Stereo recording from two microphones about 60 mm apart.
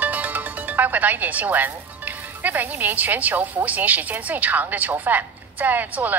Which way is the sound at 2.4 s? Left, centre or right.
Right.